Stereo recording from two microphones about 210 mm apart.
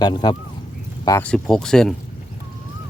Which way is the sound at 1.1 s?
10° left (ahead or behind).